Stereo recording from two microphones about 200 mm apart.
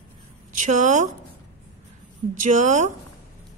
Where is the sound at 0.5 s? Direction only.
40° right (ahead or behind).